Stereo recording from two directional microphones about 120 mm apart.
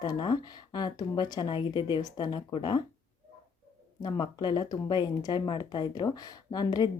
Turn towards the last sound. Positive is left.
turn(degrees=35)  # may be behind; listen again after turning